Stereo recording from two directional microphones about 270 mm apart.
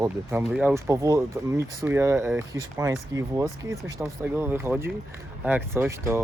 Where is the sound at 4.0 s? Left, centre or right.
Centre.